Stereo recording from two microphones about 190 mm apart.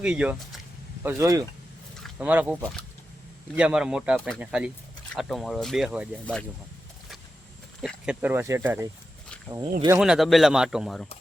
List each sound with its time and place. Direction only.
0.0 s speech: 5° right (ahead or behind)
1.0 s speech: 20° right (ahead or behind)
2.1 s speech: 5° right (ahead or behind)
7.8 s speech: 5° right (ahead or behind); by 9.7 s 20° right (ahead or behind)
10.0 s speech: centre (ahead or behind)